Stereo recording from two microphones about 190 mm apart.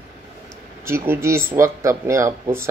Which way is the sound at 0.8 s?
10° right (ahead or behind).